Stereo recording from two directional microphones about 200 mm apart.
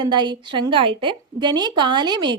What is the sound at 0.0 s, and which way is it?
A woman's voice, 20° right (ahead or behind).